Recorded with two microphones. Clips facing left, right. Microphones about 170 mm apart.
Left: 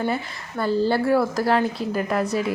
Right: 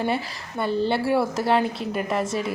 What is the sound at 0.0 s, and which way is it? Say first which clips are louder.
Speech: even; 30° right (ahead or behind).